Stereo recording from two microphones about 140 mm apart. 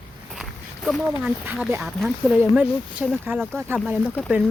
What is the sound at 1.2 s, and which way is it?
Speech, 5° right (ahead or behind).